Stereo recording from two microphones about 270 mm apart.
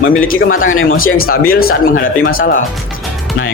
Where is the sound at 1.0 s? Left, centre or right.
Left.